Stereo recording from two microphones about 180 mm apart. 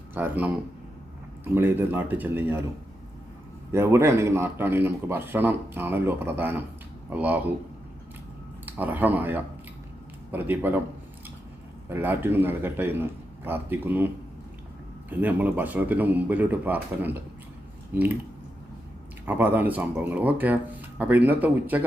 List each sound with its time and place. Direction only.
0.1 s speech: 10° right (ahead or behind)
1.5 s speech: 10° right (ahead or behind)
3.7 s speech: 15° right (ahead or behind)
8.6 s speech: 10° right (ahead or behind)
11.9 s speech: 10° right (ahead or behind)
15.1 s speech: 10° right (ahead or behind)
19.2 s speech: 10° right (ahead or behind)